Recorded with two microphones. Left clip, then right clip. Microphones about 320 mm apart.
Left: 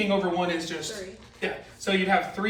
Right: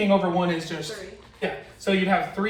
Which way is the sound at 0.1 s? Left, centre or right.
Centre.